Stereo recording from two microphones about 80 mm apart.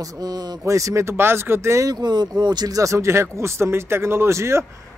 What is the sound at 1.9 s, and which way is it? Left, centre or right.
Speech, right.